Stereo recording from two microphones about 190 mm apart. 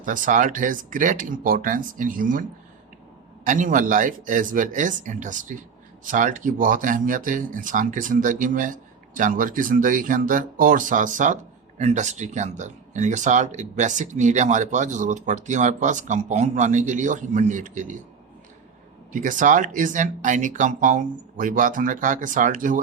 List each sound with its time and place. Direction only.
0.0 s speech: 45° right (ahead or behind)
19.1 s speech: 45° right (ahead or behind)